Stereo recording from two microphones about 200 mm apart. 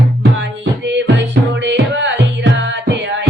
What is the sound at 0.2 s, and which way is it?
Music, 65° right (ahead or behind).